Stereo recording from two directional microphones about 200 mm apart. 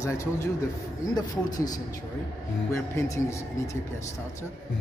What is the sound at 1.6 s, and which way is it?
Speech, 20° left (ahead or behind).